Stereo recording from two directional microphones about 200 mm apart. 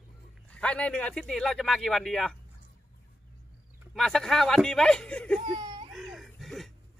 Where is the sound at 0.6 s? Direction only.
5° left (ahead or behind).